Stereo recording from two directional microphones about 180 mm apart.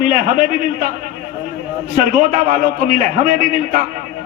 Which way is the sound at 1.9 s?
50° right (ahead or behind).